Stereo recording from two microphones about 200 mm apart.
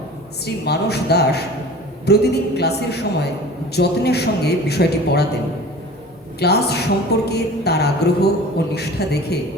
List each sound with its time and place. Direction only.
0.4 s a man's voice: 55° left (ahead or behind)
6.4 s a man's voice: 55° left (ahead or behind)